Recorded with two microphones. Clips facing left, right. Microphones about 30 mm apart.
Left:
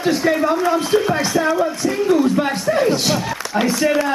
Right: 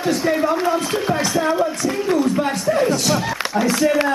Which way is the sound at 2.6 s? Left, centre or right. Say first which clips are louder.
Left 1 dB; centre.